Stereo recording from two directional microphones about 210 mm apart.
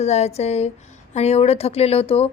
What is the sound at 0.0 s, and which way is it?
A woman's voice, 30° left (ahead or behind).